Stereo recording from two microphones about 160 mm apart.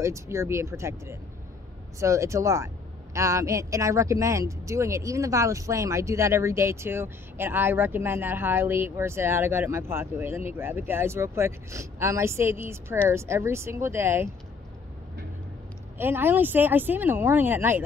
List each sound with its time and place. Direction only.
0.0 s speech: 20° right (ahead or behind)
16.0 s speech: 15° right (ahead or behind)